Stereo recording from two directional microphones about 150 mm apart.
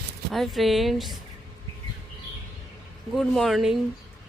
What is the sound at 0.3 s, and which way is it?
Speech, centre (ahead or behind).